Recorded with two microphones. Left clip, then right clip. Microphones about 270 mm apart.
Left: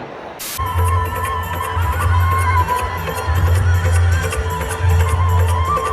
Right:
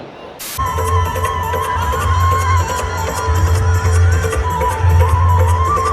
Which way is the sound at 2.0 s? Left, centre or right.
Right.